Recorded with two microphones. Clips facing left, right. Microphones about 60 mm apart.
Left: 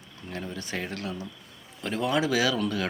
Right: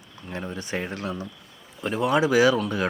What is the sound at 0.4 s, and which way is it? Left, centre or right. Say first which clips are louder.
Speech: right 4 dB; right.